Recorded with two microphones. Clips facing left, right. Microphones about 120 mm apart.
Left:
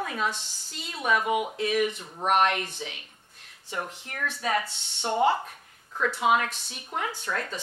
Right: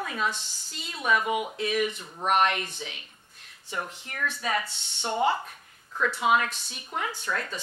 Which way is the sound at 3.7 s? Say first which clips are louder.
Even; 35° left (ahead or behind).